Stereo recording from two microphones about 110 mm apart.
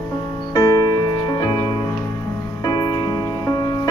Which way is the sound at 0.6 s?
30° left (ahead or behind).